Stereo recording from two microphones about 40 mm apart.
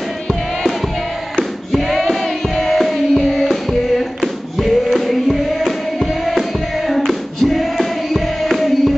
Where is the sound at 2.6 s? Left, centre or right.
Centre.